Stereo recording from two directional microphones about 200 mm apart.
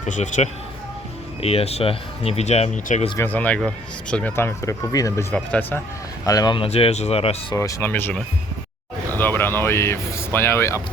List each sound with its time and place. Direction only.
0.0 s speech: 35° left (ahead or behind)
3.2 s speech: 10° left (ahead or behind)
6.2 s speech: 20° left (ahead or behind)
7.5 s speech: 15° left (ahead or behind)